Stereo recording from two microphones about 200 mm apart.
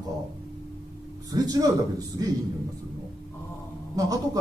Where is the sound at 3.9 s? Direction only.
15° right (ahead or behind).